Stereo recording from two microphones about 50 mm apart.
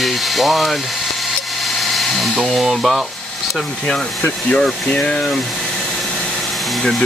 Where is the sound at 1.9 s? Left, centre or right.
Centre.